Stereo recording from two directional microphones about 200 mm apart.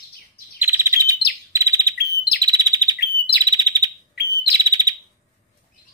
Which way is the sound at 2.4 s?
20° right (ahead or behind).